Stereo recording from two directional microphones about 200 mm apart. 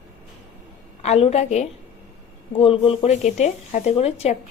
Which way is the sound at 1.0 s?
30° left (ahead or behind).